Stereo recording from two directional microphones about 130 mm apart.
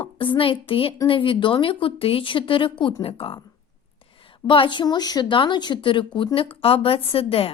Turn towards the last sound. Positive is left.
turn(degrees=45)  # may be behind; listen again after turning